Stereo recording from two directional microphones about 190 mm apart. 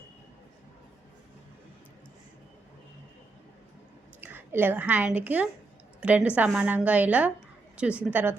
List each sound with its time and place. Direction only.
4.2 s a woman's voice: 10° right (ahead or behind)